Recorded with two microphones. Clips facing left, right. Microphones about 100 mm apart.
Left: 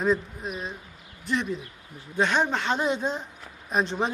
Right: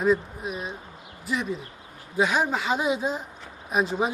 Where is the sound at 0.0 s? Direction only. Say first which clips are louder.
Right 2 dB; 5° right (ahead or behind).